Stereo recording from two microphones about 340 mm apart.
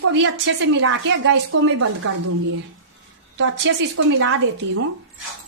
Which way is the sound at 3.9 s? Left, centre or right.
Right.